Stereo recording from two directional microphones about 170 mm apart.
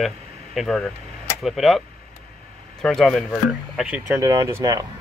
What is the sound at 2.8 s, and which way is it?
Speech, 5° left (ahead or behind).